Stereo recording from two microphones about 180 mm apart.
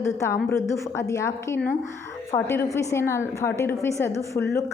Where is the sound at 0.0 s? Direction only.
15° left (ahead or behind).